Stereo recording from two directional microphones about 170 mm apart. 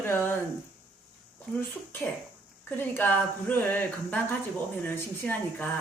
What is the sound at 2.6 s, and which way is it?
Speech, 10° left (ahead or behind).